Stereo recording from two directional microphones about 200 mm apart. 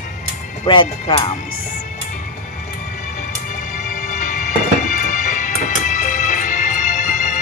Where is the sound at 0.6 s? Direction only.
25° left (ahead or behind).